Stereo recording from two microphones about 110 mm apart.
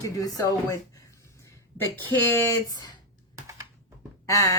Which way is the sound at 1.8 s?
20° left (ahead or behind).